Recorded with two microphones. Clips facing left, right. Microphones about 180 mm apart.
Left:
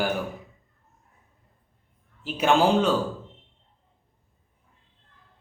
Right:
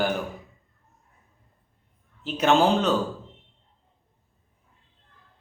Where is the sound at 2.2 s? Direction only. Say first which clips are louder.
Right 1 dB; 10° left (ahead or behind).